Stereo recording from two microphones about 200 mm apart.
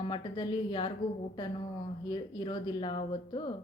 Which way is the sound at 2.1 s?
20° left (ahead or behind).